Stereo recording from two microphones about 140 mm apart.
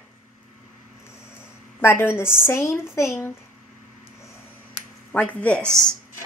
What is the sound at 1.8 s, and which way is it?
A woman's voice, 20° left (ahead or behind).